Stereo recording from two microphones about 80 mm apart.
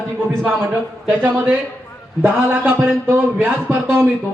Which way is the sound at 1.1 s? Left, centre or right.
Centre.